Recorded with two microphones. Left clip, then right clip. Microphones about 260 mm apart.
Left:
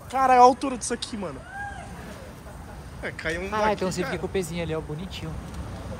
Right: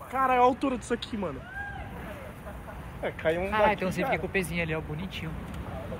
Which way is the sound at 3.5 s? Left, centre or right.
Centre.